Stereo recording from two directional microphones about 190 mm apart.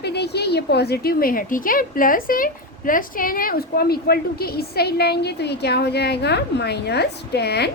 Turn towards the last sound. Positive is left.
turn(degrees=60)  # may be behind; listen again after turning